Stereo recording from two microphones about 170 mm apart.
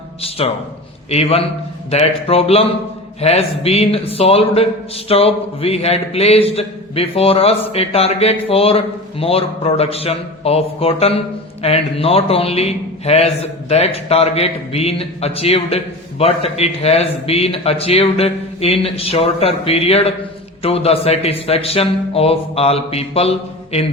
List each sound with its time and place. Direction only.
0.2 s a man's voice: 35° left (ahead or behind)